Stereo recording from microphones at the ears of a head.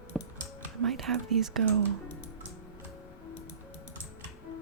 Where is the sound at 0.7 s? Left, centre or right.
Right.